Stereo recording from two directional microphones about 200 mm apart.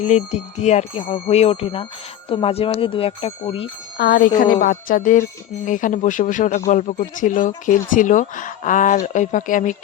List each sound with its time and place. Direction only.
0.0 s a woman's voice: 35° left (ahead or behind)
3.9 s a woman's voice: 45° left (ahead or behind)